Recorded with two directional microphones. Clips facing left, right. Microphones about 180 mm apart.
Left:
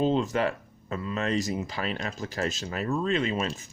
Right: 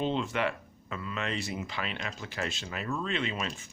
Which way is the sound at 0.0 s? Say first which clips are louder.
Left 5 dB; 40° left (ahead or behind).